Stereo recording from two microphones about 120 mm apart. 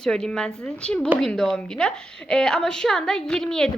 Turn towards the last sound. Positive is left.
turn(degrees=5)  # may be behind; listen again after turning